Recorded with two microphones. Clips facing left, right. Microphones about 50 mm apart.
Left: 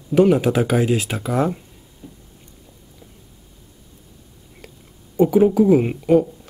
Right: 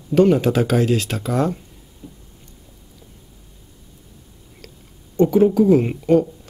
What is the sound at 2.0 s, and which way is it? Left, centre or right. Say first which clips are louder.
Vehicle: right 1 dB; centre.